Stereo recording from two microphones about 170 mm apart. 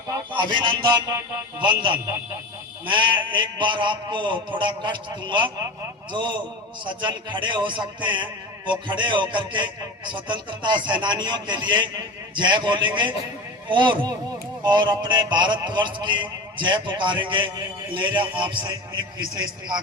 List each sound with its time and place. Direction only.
0.1 s a man's voice: 25° right (ahead or behind)